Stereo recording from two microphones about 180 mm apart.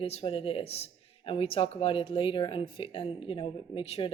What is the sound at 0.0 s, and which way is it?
Speech, 35° left (ahead or behind).